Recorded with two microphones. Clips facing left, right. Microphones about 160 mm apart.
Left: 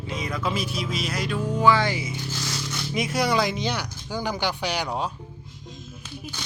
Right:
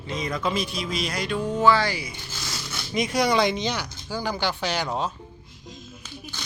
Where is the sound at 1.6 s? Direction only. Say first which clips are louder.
Even; 20° left (ahead or behind).